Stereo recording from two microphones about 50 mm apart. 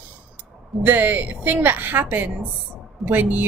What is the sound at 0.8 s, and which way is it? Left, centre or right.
A woman's voice, right.